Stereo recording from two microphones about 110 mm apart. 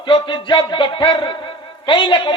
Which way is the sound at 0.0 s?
45° left (ahead or behind).